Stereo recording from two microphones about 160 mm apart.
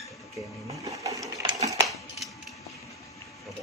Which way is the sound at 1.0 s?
20° right (ahead or behind).